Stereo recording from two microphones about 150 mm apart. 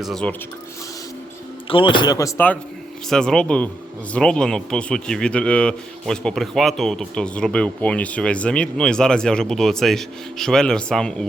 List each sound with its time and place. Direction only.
0.0 s a man's voice: 5° left (ahead or behind)
1.7 s speech: 35° left (ahead or behind)
3.1 s a man's voice: 5° left (ahead or behind)